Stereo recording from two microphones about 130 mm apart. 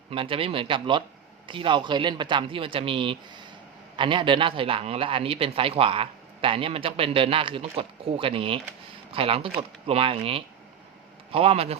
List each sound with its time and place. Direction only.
0.1 s a man's voice: 45° right (ahead or behind)